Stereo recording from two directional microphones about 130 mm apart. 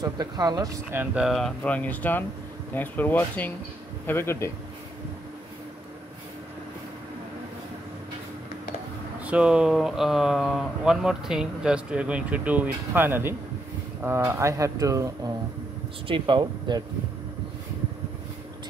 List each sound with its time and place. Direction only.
0.0 s speech: 30° right (ahead or behind)
1.1 s speech: centre (ahead or behind); by 4.5 s 20° left (ahead or behind)
9.2 s speech: 10° right (ahead or behind); by 15.3 s 25° right (ahead or behind)
16.1 s speech: 40° right (ahead or behind)